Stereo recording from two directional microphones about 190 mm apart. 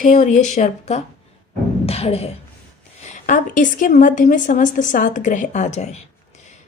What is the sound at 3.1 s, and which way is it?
A woman's voice, 40° left (ahead or behind).